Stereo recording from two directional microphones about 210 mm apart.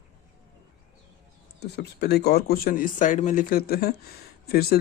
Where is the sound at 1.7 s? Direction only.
50° left (ahead or behind).